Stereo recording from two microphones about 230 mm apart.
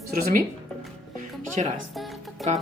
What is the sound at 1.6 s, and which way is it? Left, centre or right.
Speech, right.